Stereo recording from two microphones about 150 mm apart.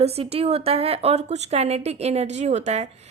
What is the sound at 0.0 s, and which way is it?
A woman's voice, 40° right (ahead or behind).